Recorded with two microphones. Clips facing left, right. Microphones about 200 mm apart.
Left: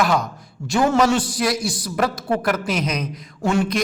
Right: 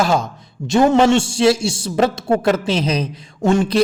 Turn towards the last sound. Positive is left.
turn(degrees=-25)  # may be behind; listen again after turning